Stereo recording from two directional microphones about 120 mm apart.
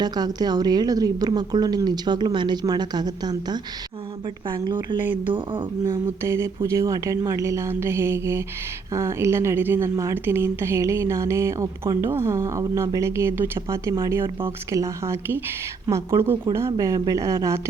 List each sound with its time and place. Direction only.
0.0 s a woman's voice: 35° right (ahead or behind)
4.6 s a woman's voice: 40° right (ahead or behind)
5.8 s speech: 25° right (ahead or behind)